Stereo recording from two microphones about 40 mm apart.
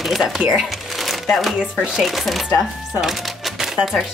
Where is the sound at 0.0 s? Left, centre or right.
Centre.